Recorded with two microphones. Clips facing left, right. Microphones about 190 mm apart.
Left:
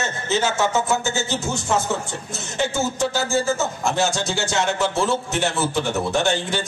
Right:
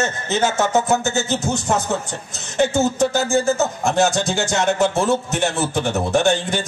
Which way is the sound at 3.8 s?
50° right (ahead or behind).